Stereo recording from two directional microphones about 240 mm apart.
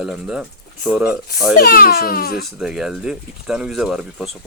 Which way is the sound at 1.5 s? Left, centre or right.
Left.